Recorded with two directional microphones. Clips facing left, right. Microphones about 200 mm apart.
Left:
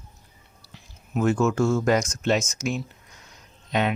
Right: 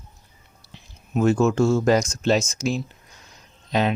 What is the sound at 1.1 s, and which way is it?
Speech, 25° right (ahead or behind).